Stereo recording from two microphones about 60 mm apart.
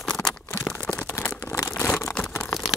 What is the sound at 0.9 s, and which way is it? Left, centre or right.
Crumpling, left.